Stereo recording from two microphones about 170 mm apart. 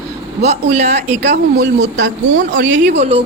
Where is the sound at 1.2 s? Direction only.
90° right.